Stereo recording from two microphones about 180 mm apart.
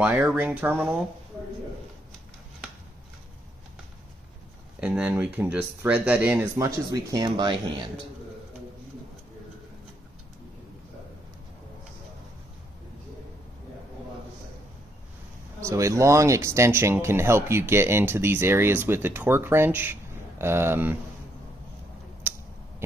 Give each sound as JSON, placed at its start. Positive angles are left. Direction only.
{"t": 0.0, "sound": "speech", "side_deg": -10}
{"t": 4.7, "sound": "speech", "side_deg": -5}
{"t": 15.6, "sound": "speech", "side_deg": -15}
{"t": 22.2, "sound": "a sound", "side_deg": -10}